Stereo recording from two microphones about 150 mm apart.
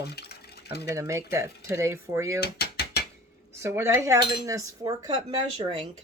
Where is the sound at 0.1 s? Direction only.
90° left.